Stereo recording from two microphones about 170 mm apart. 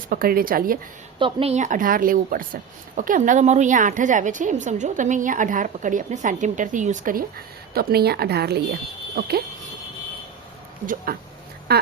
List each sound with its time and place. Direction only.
0.1 s speech: 60° right (ahead or behind)
1.2 s speech: 35° right (ahead or behind); by 9.4 s 65° right (ahead or behind)
10.8 s speech: 60° right (ahead or behind)
11.7 s rodents: 70° right (ahead or behind)